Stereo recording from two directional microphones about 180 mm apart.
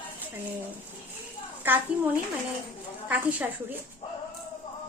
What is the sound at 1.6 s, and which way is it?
A woman's voice, 10° right (ahead or behind).